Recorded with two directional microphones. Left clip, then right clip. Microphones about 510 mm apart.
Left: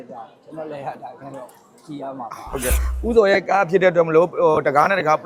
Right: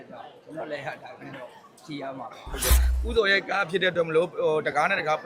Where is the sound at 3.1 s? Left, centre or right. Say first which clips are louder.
Left 8 dB; left.